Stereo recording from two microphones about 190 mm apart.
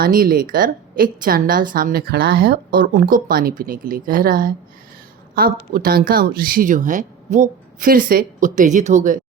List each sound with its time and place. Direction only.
0.0 s a woman's voice: 50° right (ahead or behind)